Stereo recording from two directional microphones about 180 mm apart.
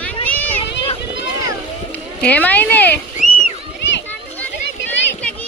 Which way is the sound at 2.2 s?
10° left (ahead or behind).